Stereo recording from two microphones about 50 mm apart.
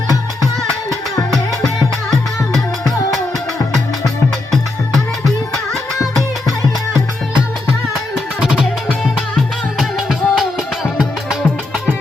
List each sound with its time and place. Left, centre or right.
1.6 s music: centre
8.4 s music: centre
9.7 s music: centre